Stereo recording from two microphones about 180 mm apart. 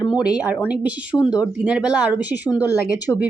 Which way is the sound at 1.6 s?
5° right (ahead or behind).